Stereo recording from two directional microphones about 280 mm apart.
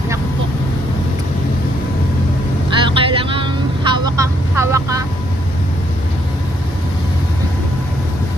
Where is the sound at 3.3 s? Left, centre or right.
Centre.